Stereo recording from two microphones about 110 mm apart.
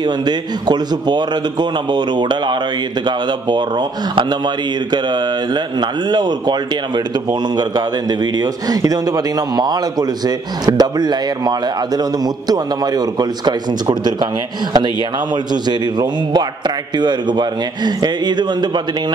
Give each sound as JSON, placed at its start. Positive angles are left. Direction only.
{"t": 0.0, "sound": "a man's voice", "side_deg": -40}
{"t": 7.5, "sound": "a man's voice", "side_deg": -40}